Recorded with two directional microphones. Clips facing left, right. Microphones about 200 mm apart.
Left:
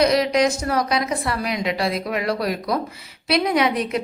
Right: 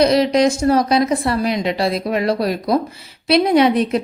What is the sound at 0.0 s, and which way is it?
A woman's voice, 30° right (ahead or behind).